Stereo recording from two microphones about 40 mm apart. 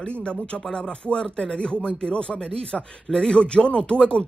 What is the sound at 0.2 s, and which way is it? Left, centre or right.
Speech, left.